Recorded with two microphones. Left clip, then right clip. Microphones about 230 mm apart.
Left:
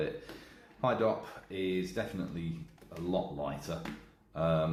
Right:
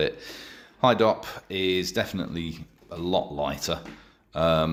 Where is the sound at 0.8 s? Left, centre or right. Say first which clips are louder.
Right 10 dB; right.